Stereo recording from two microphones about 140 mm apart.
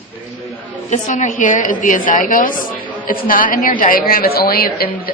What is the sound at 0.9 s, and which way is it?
A woman's voice, 60° left (ahead or behind).